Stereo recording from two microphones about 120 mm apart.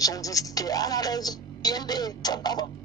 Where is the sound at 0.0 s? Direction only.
30° left (ahead or behind).